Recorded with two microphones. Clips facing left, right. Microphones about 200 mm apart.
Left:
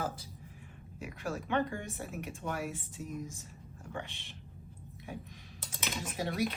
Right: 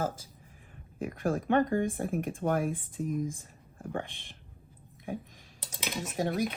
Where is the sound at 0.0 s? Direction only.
50° right (ahead or behind).